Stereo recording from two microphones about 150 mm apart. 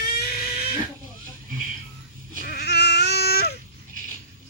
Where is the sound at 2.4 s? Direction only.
90° left.